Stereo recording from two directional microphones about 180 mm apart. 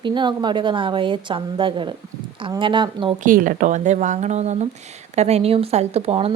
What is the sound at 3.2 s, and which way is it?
Speech, 50° right (ahead or behind).